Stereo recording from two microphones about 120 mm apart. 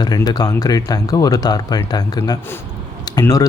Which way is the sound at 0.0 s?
35° left (ahead or behind).